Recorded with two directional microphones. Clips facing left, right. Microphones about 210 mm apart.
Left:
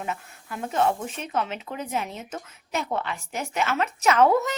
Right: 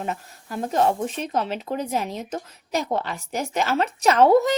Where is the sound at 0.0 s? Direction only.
35° right (ahead or behind).